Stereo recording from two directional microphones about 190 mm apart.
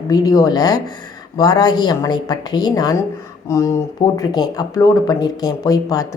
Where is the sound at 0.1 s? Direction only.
20° left (ahead or behind).